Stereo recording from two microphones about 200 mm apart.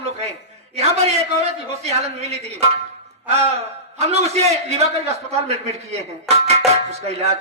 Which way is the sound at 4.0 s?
30° right (ahead or behind).